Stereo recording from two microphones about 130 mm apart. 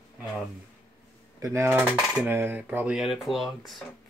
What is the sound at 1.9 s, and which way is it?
Dishes, 10° right (ahead or behind).